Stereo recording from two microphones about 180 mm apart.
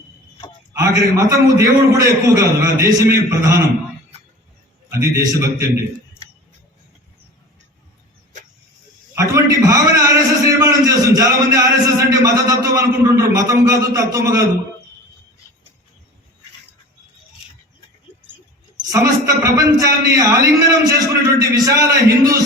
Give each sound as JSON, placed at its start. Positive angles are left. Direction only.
{"t": 0.8, "sound": "a man's voice", "side_deg": -20}
{"t": 4.9, "sound": "a man's voice", "side_deg": -15}
{"t": 9.1, "sound": "a man's voice", "side_deg": -20}
{"t": 18.9, "sound": "a man's voice", "side_deg": -15}